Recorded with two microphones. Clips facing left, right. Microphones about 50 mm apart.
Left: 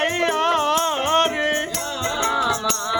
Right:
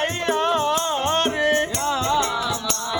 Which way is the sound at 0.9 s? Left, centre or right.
Left.